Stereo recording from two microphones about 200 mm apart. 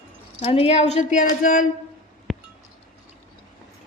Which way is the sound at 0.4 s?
30° left (ahead or behind).